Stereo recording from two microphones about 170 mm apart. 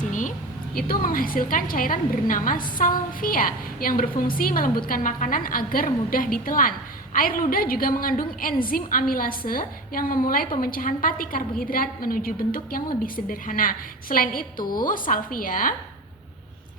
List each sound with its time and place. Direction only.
0.1 s a woman's voice: 50° left (ahead or behind)